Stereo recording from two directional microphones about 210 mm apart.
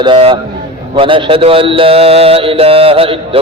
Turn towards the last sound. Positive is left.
turn(degrees=-25)  # may be behind; listen again after turning